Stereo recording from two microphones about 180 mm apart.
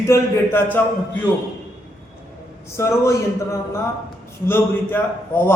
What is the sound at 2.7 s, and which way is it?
A man's voice, 15° left (ahead or behind).